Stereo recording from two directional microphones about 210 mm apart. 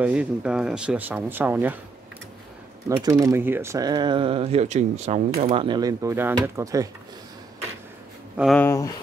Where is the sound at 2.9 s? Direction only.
15° right (ahead or behind).